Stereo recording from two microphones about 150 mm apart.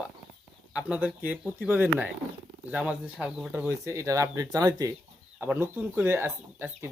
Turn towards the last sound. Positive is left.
turn(degrees=-15)  # may be behind; listen again after turning